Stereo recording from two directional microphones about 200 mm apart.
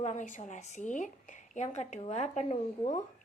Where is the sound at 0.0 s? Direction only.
35° left (ahead or behind).